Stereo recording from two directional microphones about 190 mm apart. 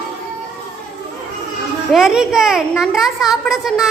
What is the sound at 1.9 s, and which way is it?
A woman's voice, centre (ahead or behind).